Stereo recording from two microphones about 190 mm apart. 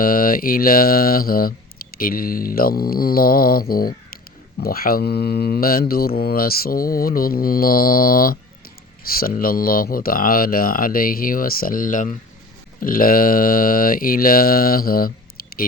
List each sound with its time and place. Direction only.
0.0 s mantra: 50° left (ahead or behind)